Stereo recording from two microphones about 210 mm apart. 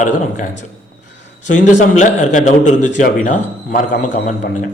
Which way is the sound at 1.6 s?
35° left (ahead or behind).